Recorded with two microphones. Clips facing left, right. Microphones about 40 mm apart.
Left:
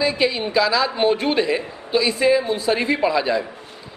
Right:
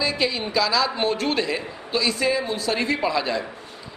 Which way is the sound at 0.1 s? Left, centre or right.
Centre.